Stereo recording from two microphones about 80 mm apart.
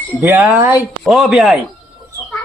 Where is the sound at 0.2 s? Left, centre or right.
Right.